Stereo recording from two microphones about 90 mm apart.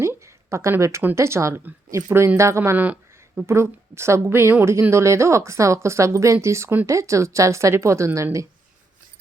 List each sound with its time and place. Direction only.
0.0 s a sound: 30° right (ahead or behind)
1.1 s a woman's voice: 30° right (ahead or behind)
2.7 s speech: 20° right (ahead or behind)
3.4 s a woman's voice: 30° right (ahead or behind)